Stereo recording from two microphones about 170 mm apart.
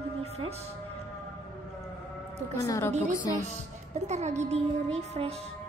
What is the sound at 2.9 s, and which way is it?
Speech, 45° right (ahead or behind).